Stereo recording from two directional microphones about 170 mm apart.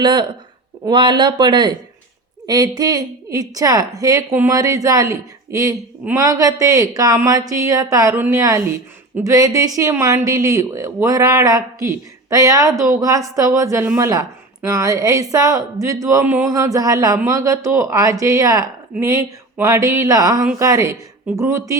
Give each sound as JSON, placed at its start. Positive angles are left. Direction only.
{"t": 0.0, "sound": "a woman's voice", "side_deg": -25}